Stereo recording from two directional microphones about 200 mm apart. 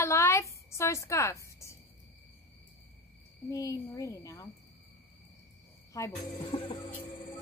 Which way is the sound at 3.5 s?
15° left (ahead or behind).